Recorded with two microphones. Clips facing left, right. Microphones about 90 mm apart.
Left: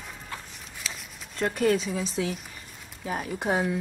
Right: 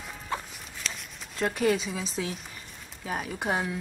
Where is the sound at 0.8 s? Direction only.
Centre (ahead or behind).